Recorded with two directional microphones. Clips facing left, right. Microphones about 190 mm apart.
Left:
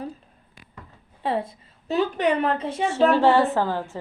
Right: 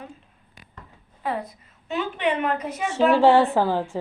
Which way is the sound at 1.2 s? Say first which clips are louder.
Left 3 dB; 30° left (ahead or behind).